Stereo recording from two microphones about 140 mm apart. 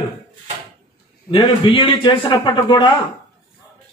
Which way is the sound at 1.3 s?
40° left (ahead or behind).